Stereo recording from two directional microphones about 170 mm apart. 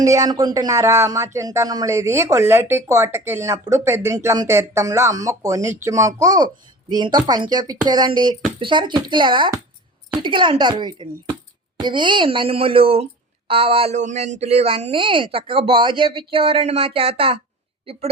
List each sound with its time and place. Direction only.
0.0 s a child's voice: 20° right (ahead or behind)